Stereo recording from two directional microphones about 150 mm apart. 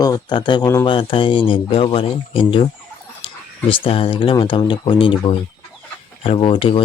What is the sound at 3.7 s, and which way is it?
Speech, 40° left (ahead or behind).